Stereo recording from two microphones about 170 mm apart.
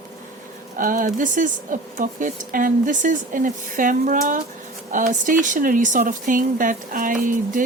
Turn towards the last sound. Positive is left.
turn(degrees=-50)  # may be behind; listen again after turning